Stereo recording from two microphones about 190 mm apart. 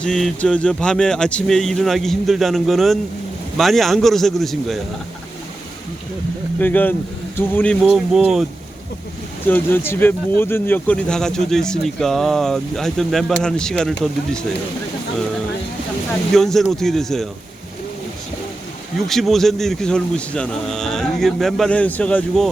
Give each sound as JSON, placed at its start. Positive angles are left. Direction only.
{"t": 0.0, "sound": "speech", "side_deg": 5}
{"t": 6.6, "sound": "speech", "side_deg": 10}
{"t": 9.5, "sound": "speech", "side_deg": 10}
{"t": 16.3, "sound": "speech", "side_deg": 0}
{"t": 19.0, "sound": "speech", "side_deg": 0}